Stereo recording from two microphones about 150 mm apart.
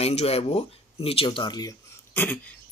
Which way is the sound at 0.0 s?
45° left (ahead or behind).